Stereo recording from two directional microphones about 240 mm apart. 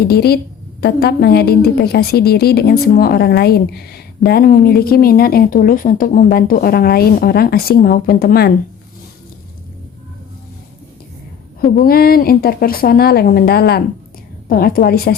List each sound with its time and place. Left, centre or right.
0.1 s a woman's voice: left
11.6 s a woman's voice: left